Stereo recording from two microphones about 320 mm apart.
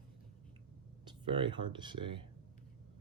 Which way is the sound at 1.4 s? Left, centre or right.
Centre.